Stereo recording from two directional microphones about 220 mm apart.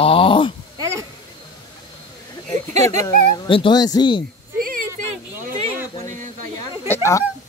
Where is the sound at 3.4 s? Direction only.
20° left (ahead or behind).